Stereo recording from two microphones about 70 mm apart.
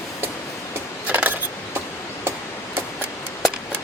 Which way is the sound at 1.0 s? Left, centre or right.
Right.